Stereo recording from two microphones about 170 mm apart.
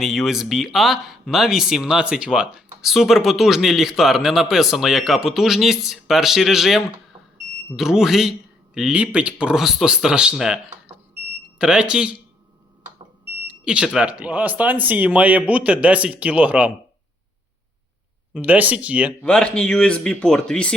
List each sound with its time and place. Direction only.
0.0 s speech: centre (ahead or behind)
13.5 s speech: 5° right (ahead or behind)
18.3 s speech: 10° right (ahead or behind)
19.2 s speech: 5° left (ahead or behind)